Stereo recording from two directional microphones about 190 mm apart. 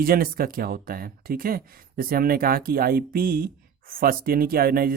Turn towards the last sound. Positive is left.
turn(degrees=-50)  # may be behind; listen again after turning